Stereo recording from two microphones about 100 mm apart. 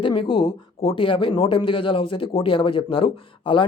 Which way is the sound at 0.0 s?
60° left (ahead or behind).